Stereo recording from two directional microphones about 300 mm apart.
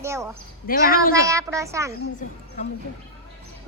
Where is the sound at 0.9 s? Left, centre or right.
Left.